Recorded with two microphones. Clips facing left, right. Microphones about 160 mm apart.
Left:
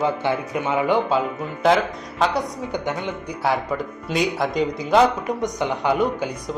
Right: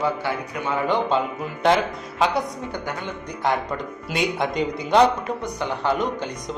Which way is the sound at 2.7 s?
20° left (ahead or behind).